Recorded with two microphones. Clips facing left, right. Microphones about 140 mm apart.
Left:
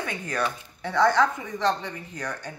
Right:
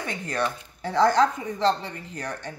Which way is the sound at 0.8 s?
35° right (ahead or behind).